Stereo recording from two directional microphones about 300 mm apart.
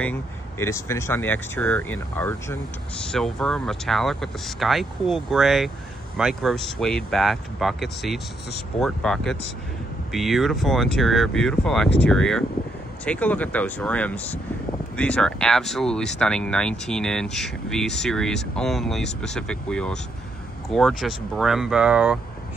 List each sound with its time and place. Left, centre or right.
0.0 s speech: centre